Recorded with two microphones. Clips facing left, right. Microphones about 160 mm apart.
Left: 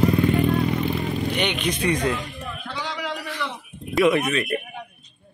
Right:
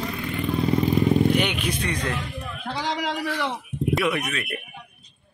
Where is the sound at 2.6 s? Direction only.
45° right (ahead or behind).